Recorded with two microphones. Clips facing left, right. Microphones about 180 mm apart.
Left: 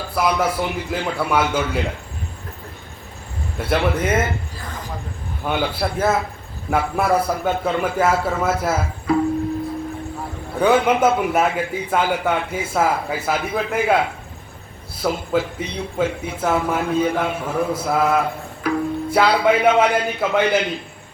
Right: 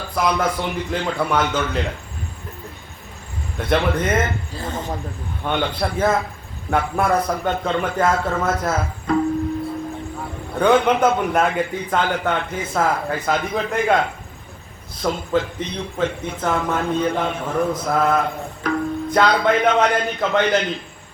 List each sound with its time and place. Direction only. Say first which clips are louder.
0.1 s speech: even; 5° left (ahead or behind)
3.6 s speech: even; 5° left (ahead or behind)
4.5 s a sound: right 6 dB; 25° right (ahead or behind)
5.4 s a man's voice: even; 5° left (ahead or behind)
10.6 s speech: even; 5° left (ahead or behind)